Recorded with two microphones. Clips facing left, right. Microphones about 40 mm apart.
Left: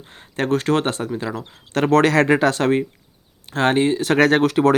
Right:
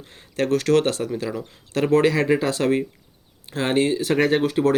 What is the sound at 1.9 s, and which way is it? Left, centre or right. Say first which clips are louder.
Speech: left 3 dB; left.